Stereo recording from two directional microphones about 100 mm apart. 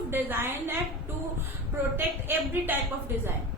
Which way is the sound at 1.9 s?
20° right (ahead or behind).